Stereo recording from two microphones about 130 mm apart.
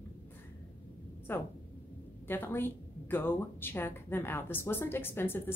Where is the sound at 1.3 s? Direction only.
15° left (ahead or behind).